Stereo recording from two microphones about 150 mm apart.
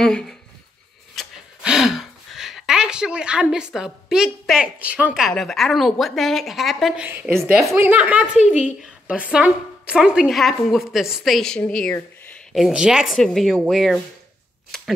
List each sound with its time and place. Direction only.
0.0 s a woman's voice: 5° left (ahead or behind)
1.1 s a sound: 5° right (ahead or behind)
5.3 s a woman's voice: centre (ahead or behind)
7.1 s a woman's voice: 15° right (ahead or behind)
14.7 s shuffling cards: 5° left (ahead or behind)